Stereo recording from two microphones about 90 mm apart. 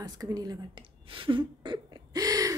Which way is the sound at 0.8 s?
75° right (ahead or behind).